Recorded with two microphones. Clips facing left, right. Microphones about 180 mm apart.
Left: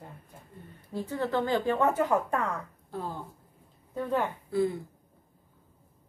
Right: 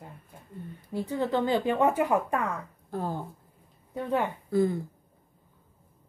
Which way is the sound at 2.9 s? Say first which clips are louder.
Right 4 dB; 45° right (ahead or behind).